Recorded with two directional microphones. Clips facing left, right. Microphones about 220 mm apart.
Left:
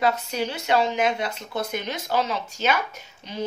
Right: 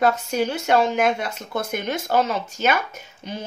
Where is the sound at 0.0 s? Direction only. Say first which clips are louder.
Right 4 dB; 50° right (ahead or behind).